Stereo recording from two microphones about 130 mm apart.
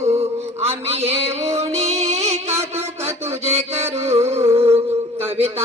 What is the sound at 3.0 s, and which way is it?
Mantra, 50° right (ahead or behind).